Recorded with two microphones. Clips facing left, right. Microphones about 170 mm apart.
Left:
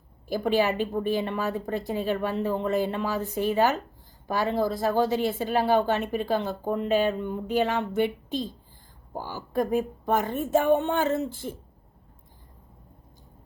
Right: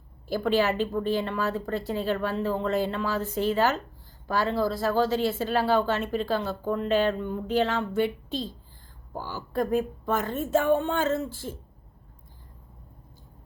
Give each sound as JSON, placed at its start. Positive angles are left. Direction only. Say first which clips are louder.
{"t": 0.3, "sound": "a woman's voice", "louder": "even", "side_deg": 15}